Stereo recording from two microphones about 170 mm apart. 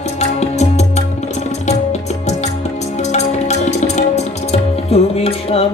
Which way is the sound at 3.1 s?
40° left (ahead or behind).